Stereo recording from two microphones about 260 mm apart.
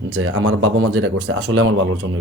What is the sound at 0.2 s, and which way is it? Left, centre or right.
Speech, right.